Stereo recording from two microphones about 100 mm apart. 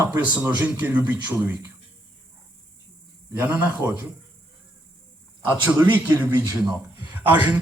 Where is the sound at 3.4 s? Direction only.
15° right (ahead or behind).